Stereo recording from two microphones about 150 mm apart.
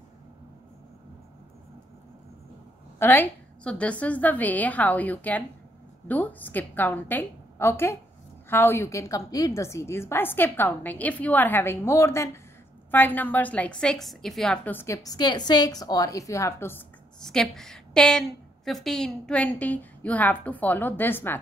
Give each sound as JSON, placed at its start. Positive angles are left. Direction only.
{"t": 3.0, "sound": "a woman's voice", "side_deg": 15}
{"t": 15.0, "sound": "a woman's voice", "side_deg": 30}
{"t": 17.2, "sound": "a woman's voice", "side_deg": 5}